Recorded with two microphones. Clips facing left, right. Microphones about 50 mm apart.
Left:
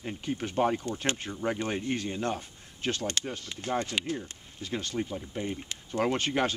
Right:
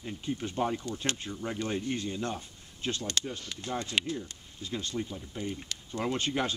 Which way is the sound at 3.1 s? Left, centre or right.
Left.